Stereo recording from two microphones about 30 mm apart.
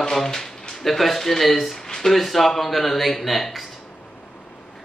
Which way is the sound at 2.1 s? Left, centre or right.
Centre.